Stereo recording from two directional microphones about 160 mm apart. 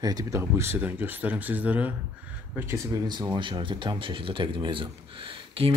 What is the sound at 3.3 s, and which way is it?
Speech, 30° right (ahead or behind).